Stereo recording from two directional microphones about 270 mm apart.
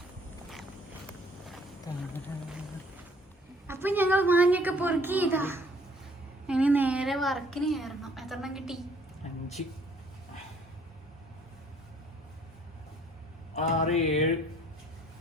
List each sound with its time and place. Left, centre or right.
1.9 s a sound: centre
3.7 s a woman's voice: centre
13.5 s mantra: left